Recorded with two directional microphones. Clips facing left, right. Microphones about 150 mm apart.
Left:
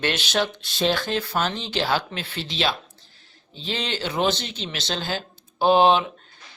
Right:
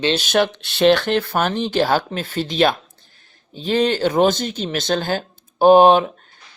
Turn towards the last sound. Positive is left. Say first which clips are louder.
# right 6 dB
turn(degrees=-45)  # may be behind; listen again after turning